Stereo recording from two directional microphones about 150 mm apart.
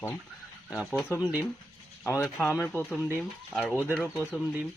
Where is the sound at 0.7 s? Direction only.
Centre (ahead or behind).